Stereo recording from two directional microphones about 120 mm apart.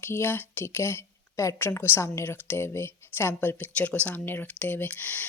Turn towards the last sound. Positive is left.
turn(degrees=15)  # may be behind; listen again after turning